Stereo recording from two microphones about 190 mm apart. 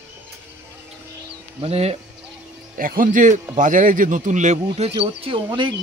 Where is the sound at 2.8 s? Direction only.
45° right (ahead or behind); by 5.4 s 30° right (ahead or behind).